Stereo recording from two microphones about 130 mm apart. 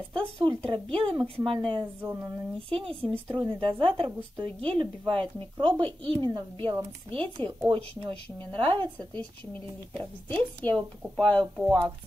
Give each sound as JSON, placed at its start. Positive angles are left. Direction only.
{"t": 0.1, "sound": "a woman's voice", "side_deg": -40}
{"t": 9.2, "sound": "a woman's voice", "side_deg": 10}